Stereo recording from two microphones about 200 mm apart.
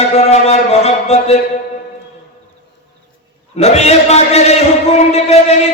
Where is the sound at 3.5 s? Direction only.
30° left (ahead or behind).